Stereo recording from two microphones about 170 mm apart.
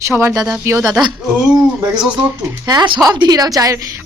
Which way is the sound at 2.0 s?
5° right (ahead or behind).